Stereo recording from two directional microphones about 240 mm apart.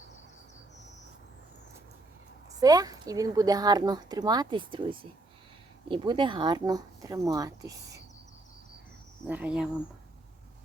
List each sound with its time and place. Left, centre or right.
2.6 s speech: centre
9.2 s speech: centre